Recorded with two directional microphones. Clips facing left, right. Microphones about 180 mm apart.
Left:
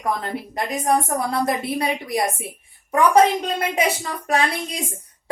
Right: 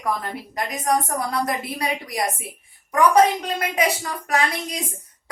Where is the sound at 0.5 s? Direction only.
25° left (ahead or behind).